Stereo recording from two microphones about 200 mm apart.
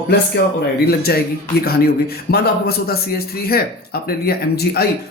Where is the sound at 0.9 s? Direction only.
50° left (ahead or behind).